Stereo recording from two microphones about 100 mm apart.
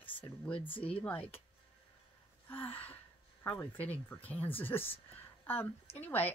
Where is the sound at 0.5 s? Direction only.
65° left (ahead or behind).